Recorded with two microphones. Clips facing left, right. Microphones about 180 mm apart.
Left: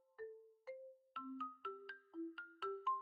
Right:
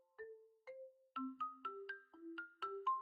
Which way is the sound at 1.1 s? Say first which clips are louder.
Right 3 dB; centre (ahead or behind).